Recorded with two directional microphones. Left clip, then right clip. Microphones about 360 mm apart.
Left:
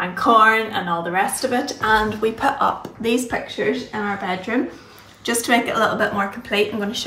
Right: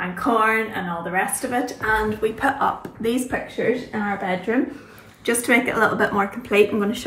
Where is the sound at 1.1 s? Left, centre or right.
Centre.